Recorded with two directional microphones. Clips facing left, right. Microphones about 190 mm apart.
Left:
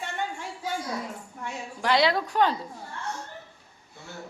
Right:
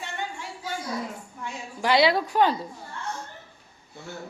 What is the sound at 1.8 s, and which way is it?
Speech, 5° right (ahead or behind).